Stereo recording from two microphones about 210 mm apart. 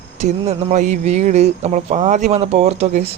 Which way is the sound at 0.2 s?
35° right (ahead or behind).